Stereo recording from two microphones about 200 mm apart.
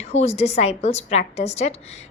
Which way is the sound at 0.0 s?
30° left (ahead or behind).